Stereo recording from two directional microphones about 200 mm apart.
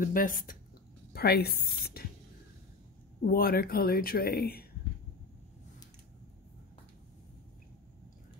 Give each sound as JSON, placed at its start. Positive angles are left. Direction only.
{"t": 0.0, "sound": "speech", "side_deg": 45}
{"t": 3.3, "sound": "speech", "side_deg": 50}